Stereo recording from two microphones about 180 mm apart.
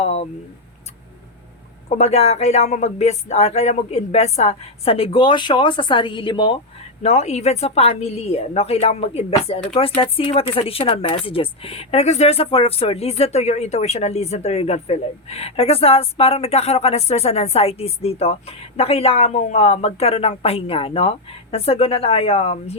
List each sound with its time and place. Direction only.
0.0 s speech: 35° left (ahead or behind)
1.9 s a woman's voice: 35° left (ahead or behind)